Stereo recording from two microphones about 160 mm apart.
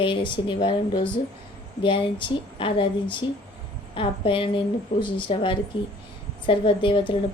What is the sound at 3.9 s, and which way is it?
Speech, 30° left (ahead or behind).